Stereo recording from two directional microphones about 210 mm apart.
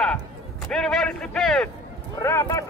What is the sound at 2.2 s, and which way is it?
Speech, 15° left (ahead or behind).